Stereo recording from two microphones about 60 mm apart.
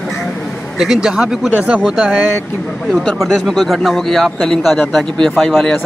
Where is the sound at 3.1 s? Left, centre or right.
Centre.